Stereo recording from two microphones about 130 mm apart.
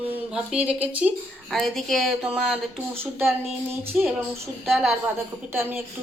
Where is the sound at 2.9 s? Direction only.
15° right (ahead or behind).